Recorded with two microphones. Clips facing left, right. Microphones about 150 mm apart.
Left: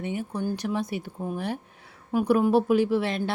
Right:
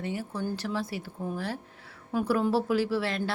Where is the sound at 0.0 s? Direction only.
20° left (ahead or behind).